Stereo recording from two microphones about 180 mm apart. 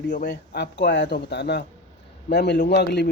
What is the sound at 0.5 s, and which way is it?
A man's voice, 70° left (ahead or behind).